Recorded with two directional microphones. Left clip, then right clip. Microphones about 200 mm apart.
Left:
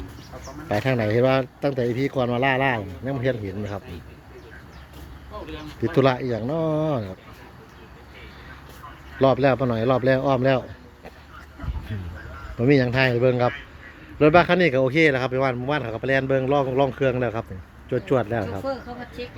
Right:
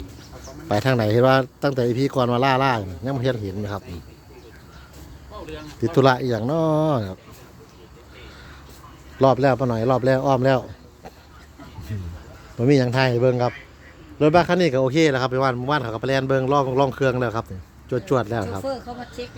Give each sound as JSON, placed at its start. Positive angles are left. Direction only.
{"t": 0.7, "sound": "speech", "side_deg": -30}
{"t": 6.0, "sound": "speech", "side_deg": -25}
{"t": 9.1, "sound": "speech", "side_deg": -25}
{"t": 12.5, "sound": "speech", "side_deg": -25}
{"t": 18.6, "sound": "speech", "side_deg": -45}